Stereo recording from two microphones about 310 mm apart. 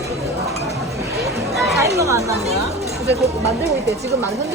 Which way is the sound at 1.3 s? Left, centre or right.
Centre.